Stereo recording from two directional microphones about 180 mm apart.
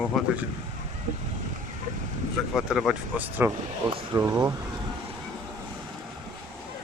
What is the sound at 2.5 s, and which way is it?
Speech, 5° right (ahead or behind).